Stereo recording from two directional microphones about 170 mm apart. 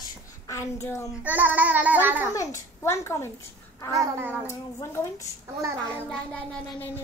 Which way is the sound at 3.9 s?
15° right (ahead or behind).